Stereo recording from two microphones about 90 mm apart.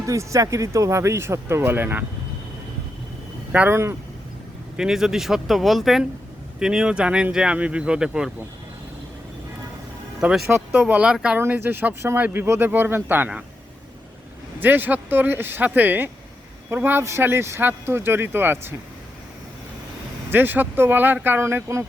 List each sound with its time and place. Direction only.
0.0 s speech: 35° right (ahead or behind)
3.7 s speech: 30° right (ahead or behind)
4.8 s speech: 5° right (ahead or behind)
10.2 s speech: 5° right (ahead or behind)
10.7 s speech: 15° right (ahead or behind)
11.3 s speech: 20° right (ahead or behind)
14.6 s speech: 20° right (ahead or behind)
20.3 s speech: 20° right (ahead or behind)